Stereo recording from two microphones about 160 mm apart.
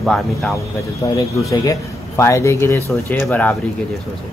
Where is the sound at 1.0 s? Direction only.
20° left (ahead or behind).